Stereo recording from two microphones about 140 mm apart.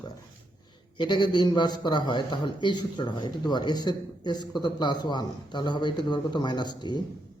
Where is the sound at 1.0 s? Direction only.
30° left (ahead or behind).